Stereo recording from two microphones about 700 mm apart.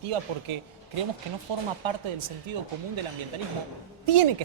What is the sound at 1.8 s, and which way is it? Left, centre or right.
Speech, right.